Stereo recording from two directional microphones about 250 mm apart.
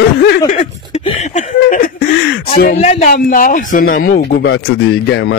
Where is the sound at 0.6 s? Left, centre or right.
Left.